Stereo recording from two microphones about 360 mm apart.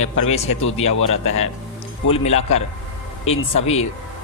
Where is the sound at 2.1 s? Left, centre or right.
Centre.